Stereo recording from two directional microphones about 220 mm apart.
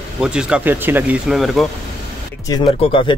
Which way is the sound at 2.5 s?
20° left (ahead or behind).